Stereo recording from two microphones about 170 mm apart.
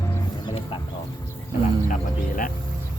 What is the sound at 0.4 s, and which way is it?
Music, 30° left (ahead or behind).